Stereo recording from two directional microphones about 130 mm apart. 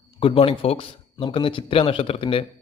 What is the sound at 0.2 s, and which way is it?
Speech, 45° left (ahead or behind).